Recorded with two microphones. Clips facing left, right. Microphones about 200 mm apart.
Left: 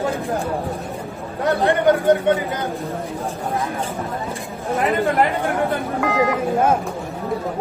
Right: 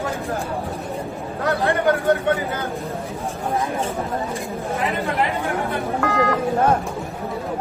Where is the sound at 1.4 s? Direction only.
20° left (ahead or behind).